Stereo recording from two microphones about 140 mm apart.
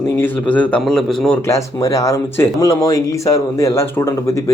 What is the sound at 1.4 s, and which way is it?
Speech, 20° left (ahead or behind).